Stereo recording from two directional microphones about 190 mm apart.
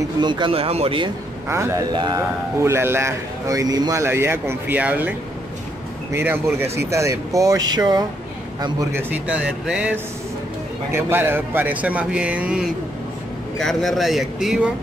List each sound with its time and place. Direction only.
0.2 s a man's voice: 25° right (ahead or behind)
1.5 s speech: 15° right (ahead or behind)
6.1 s a man's voice: 10° right (ahead or behind)
9.1 s speech: 5° right (ahead or behind)